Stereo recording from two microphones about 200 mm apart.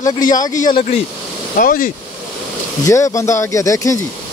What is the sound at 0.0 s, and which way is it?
Speech, 40° left (ahead or behind).